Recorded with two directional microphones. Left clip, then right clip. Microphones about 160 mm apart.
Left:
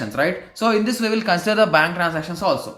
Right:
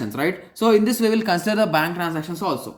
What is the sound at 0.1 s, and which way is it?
Speech, 30° right (ahead or behind).